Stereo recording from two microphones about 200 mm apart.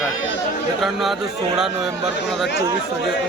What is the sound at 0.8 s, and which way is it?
A man's voice, centre (ahead or behind).